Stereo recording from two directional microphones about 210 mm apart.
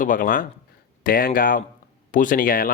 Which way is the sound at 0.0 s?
40° left (ahead or behind).